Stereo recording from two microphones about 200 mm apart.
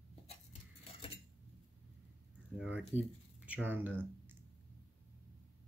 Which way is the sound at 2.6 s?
5° right (ahead or behind).